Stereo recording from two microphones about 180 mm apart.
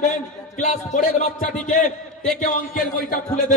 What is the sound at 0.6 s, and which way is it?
A man's voice, 45° left (ahead or behind).